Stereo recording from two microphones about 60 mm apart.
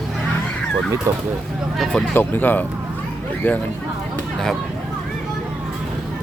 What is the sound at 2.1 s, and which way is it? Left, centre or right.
Speech, left.